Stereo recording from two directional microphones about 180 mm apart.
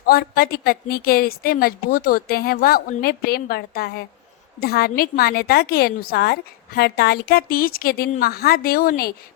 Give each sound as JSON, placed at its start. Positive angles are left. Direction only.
{"t": 0.0, "sound": "a woman's voice", "side_deg": 55}